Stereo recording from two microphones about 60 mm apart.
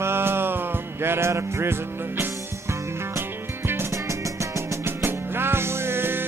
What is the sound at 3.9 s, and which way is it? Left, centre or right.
Music, right.